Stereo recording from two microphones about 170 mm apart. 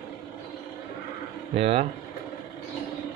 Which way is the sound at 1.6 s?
35° right (ahead or behind).